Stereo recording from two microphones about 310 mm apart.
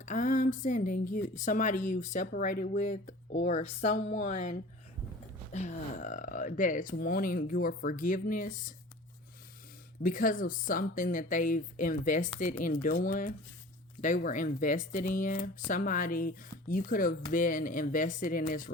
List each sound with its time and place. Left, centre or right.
0.0 s speech: left
10.0 s speech: left